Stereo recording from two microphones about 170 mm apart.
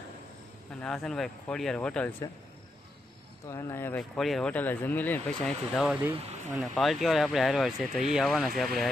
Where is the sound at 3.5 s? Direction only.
15° left (ahead or behind).